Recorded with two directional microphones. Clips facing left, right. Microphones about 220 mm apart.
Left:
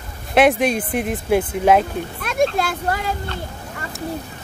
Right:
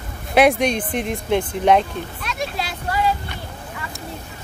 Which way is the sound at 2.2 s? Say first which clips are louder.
Left 11 dB; 50° left (ahead or behind).